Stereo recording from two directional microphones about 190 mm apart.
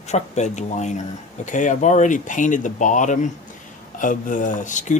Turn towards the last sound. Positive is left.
turn(degrees=40)  # may be behind; listen again after turning